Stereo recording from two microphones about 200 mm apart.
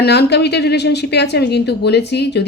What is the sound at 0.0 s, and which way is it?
A woman's voice, 55° left (ahead or behind).